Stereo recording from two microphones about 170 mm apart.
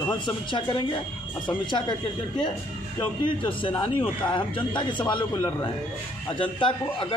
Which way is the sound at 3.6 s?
30° left (ahead or behind).